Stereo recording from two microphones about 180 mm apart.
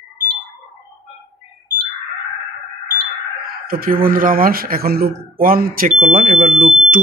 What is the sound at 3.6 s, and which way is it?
Speech, 55° right (ahead or behind).